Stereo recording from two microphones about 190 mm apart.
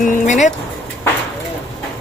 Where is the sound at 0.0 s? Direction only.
40° left (ahead or behind).